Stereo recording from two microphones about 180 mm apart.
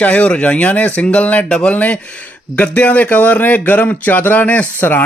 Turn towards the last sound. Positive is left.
turn(degrees=10)  # may be behind; listen again after turning